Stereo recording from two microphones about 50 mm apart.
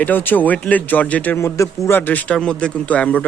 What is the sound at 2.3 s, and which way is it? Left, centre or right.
A man's voice, centre.